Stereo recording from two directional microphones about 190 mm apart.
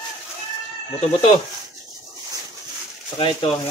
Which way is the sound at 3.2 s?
25° left (ahead or behind).